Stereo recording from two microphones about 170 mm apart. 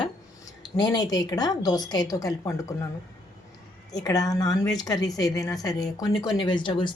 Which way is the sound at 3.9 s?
20° left (ahead or behind).